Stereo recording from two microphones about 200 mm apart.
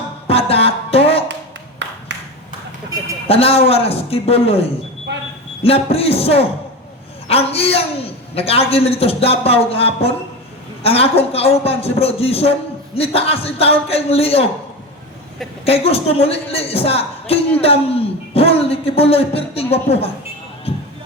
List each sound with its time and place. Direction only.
0.3 s music: 30° left (ahead or behind)
1.8 s a sound: 65° right (ahead or behind)
3.2 s a man's voice: 30° left (ahead or behind)
5.6 s a man's voice: 30° left (ahead or behind)
15.6 s a man's voice: 30° left (ahead or behind)
20.7 s music: 30° left (ahead or behind)